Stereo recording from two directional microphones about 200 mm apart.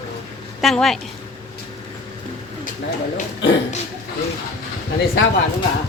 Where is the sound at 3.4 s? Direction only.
60° left (ahead or behind).